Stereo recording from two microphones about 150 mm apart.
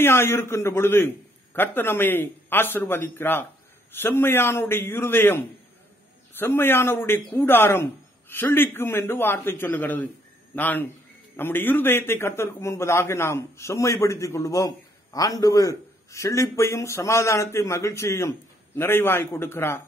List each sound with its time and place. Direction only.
0.0 s a man's voice: 15° left (ahead or behind)